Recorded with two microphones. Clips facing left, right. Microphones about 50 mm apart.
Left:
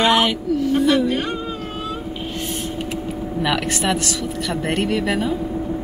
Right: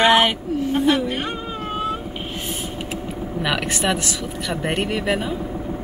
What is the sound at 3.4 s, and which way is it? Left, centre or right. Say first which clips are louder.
Speech: left 1 dB; centre.